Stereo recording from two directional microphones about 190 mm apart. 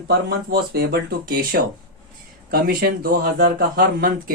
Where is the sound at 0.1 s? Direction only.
55° right (ahead or behind).